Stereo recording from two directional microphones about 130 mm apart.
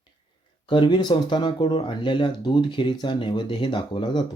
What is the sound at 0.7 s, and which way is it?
Speech, 35° left (ahead or behind).